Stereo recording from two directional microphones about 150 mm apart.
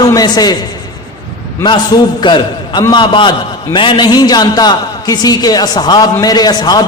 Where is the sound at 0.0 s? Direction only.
25° left (ahead or behind).